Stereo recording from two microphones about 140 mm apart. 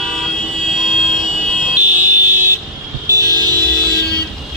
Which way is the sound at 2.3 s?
15° right (ahead or behind).